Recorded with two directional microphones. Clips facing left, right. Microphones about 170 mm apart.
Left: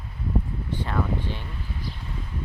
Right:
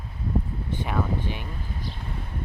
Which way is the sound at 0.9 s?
15° right (ahead or behind).